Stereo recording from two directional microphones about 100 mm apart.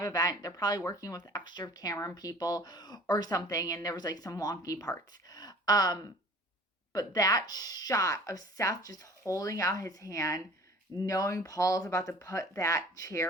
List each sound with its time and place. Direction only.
0.0 s speech: 40° left (ahead or behind)